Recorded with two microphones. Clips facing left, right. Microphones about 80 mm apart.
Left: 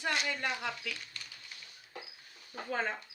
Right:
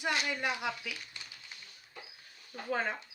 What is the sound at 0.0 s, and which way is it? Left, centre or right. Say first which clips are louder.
Speech: right 1 dB; centre.